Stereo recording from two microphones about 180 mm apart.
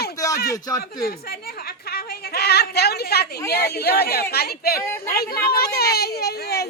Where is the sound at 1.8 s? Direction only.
60° left (ahead or behind).